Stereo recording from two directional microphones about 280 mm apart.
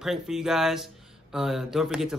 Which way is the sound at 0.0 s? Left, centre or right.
Centre.